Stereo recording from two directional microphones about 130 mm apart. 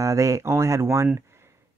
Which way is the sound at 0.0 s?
25° right (ahead or behind).